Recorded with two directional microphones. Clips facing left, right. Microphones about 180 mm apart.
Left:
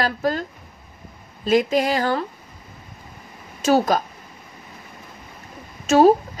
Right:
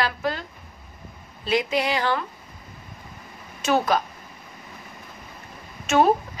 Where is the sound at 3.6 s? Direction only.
40° left (ahead or behind).